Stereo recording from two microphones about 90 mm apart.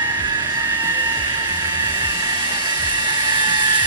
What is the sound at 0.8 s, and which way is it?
Vehicle, 50° right (ahead or behind).